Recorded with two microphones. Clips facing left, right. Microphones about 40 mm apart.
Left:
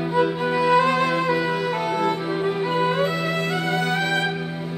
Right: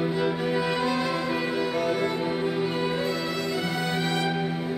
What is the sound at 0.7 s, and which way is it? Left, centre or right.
Music, left.